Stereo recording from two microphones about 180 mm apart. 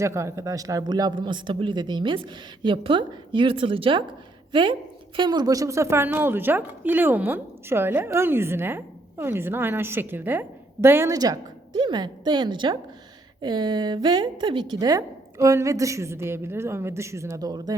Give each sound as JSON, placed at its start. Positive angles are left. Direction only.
{"t": 0.0, "sound": "speech", "side_deg": -15}